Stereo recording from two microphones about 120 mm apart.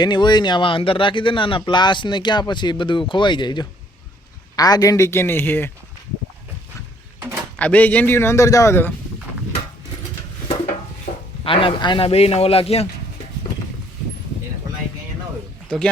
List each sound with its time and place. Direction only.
0.0 s a man's voice: 35° left (ahead or behind); by 5.7 s 15° left (ahead or behind)
7.5 s a man's voice: 10° left (ahead or behind)
11.4 s a man's voice: 45° left (ahead or behind)